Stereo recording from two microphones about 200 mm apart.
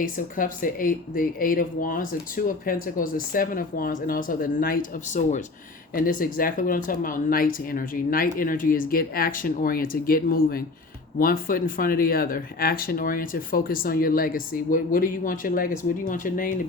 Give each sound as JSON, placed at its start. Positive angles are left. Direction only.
{"t": 0.0, "sound": "speech", "side_deg": 45}